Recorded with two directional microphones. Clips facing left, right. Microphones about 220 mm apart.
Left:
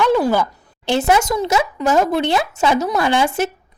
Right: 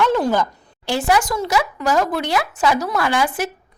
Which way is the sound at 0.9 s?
20° left (ahead or behind).